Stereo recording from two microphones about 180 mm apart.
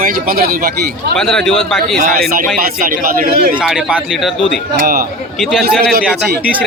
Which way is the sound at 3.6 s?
5° right (ahead or behind).